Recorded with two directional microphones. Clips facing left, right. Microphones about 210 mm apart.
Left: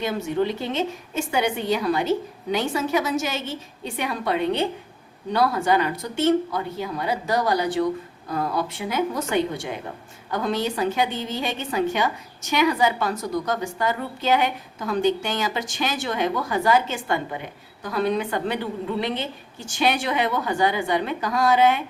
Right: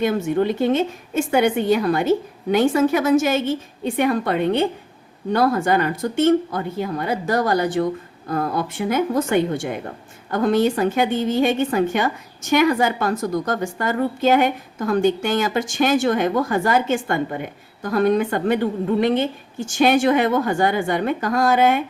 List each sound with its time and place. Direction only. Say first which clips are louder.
0.0 s a woman's voice: right 5 dB; 50° right (ahead or behind)